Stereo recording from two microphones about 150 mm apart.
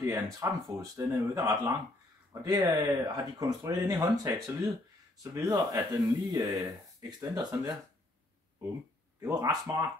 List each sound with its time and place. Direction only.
0.0 s speech: 20° right (ahead or behind)
9.2 s speech: 25° right (ahead or behind)